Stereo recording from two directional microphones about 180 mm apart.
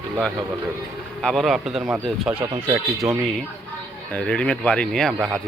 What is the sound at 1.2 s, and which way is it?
Speech, centre (ahead or behind).